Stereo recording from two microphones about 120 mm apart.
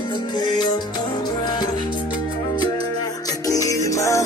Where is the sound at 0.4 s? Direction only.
35° left (ahead or behind).